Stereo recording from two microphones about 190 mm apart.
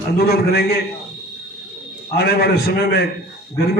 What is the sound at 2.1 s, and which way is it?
Speech, 55° left (ahead or behind).